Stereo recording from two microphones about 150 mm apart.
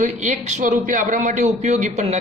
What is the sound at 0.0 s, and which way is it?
A man's voice, 50° right (ahead or behind).